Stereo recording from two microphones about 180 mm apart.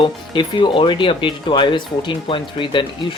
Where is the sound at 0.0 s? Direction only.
25° left (ahead or behind).